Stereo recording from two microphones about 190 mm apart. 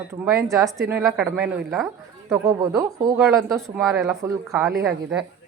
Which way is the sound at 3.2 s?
5° right (ahead or behind).